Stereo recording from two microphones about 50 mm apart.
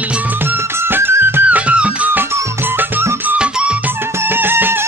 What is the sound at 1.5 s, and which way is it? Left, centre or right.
Music, right.